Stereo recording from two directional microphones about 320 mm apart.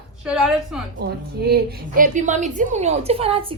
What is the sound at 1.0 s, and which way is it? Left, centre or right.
A woman's voice, right.